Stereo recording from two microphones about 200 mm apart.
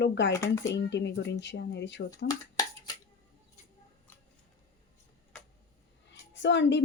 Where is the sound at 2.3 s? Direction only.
20° left (ahead or behind).